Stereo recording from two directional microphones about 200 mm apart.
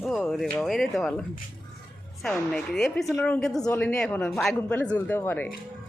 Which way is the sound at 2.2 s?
5° left (ahead or behind).